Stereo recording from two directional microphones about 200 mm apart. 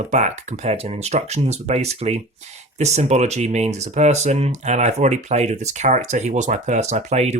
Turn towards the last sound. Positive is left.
turn(degrees=-35)  # may be behind; listen again after turning